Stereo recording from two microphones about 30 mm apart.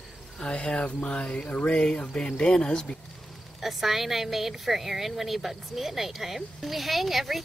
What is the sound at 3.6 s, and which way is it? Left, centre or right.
A woman's voice, centre.